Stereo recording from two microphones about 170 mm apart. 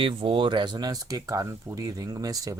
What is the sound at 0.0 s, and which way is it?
Speech, 30° right (ahead or behind).